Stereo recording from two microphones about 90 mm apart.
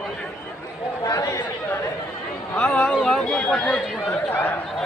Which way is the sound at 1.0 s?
40° left (ahead or behind).